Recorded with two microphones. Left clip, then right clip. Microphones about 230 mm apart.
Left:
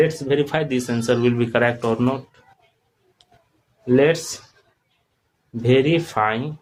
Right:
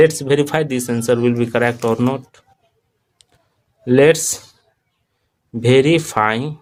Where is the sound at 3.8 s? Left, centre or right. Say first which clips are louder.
Right 5 dB; right.